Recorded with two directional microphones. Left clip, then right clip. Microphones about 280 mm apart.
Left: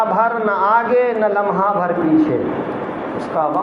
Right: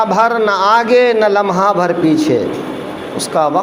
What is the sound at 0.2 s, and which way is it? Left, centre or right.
A man's voice, right.